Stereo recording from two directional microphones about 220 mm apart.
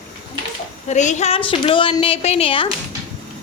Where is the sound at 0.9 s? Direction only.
30° left (ahead or behind).